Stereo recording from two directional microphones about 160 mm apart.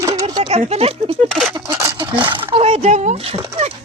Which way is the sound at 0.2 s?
25° right (ahead or behind).